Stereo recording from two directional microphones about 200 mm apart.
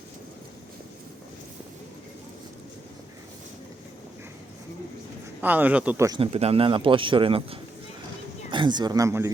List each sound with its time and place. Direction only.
5.4 s speech: 10° right (ahead or behind)
6.1 s speech: 30° right (ahead or behind)